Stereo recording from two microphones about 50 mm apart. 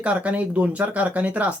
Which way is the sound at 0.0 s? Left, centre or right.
Right.